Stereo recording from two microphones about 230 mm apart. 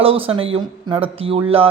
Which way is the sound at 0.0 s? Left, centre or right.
Right.